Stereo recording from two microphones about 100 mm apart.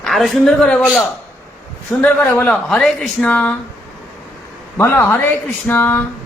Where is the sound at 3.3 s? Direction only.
15° left (ahead or behind).